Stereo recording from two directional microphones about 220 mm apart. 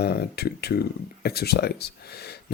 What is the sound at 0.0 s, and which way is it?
Speech, 45° left (ahead or behind).